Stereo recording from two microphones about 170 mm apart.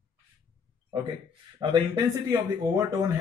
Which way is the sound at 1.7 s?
25° right (ahead or behind).